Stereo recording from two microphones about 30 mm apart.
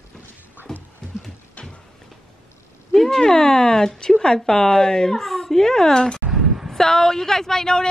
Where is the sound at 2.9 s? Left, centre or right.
Centre.